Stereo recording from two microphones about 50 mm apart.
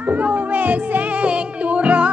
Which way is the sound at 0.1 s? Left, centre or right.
Right.